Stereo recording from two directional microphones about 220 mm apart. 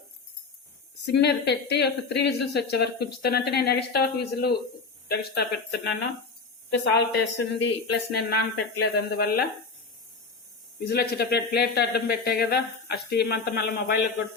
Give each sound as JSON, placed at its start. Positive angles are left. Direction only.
{"t": 1.0, "sound": "speech", "side_deg": 50}
{"t": 10.8, "sound": "speech", "side_deg": 45}